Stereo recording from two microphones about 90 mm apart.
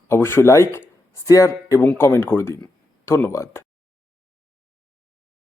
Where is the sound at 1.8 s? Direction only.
25° left (ahead or behind).